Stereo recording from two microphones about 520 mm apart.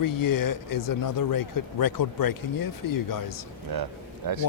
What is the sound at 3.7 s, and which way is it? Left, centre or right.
Speech, right.